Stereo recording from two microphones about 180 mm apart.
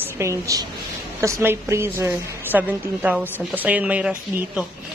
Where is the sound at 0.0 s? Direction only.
15° right (ahead or behind).